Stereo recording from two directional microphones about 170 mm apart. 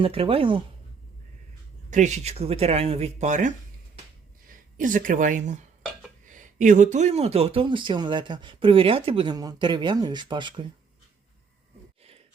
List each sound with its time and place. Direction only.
0.0 s speech: 35° right (ahead or behind)
1.9 s speech: 45° right (ahead or behind); by 10.7 s 25° right (ahead or behind)